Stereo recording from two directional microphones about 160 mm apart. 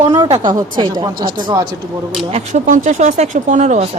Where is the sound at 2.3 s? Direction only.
45° right (ahead or behind).